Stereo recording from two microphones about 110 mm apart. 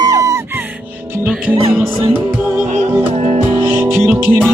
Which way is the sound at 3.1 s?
75° right (ahead or behind).